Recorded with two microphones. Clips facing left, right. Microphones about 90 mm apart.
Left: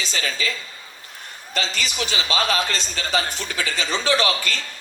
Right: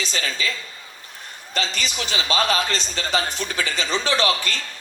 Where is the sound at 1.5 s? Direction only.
20° right (ahead or behind).